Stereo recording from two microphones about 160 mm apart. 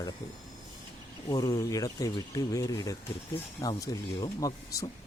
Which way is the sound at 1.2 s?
25° left (ahead or behind).